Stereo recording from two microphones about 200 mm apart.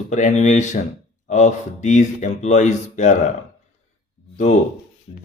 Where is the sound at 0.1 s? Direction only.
35° left (ahead or behind).